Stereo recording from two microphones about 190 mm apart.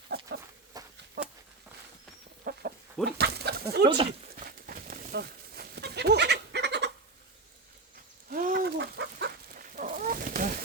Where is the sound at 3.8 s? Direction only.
30° right (ahead or behind).